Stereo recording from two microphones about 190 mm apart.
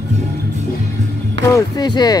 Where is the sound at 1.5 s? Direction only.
20° left (ahead or behind).